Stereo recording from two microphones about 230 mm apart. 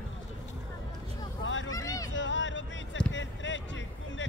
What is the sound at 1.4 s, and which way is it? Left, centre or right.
Vehicle, left.